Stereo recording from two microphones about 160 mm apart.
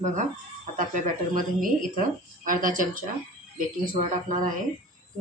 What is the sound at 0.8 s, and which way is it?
Speech, 50° right (ahead or behind).